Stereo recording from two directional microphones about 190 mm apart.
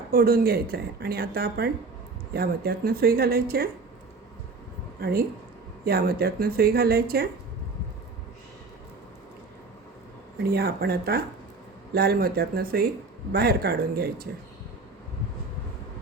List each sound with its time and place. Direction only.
0.1 s speech: 50° right (ahead or behind)
4.9 s speech: 55° right (ahead or behind)
10.4 s speech: 55° right (ahead or behind)